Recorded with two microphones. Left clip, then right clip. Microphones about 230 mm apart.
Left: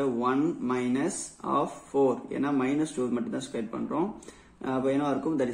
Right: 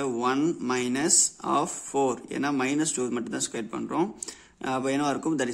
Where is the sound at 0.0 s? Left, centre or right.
Right.